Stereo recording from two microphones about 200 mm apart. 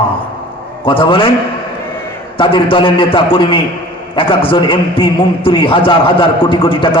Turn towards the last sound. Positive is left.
turn(degrees=25)  # may be behind; listen again after turning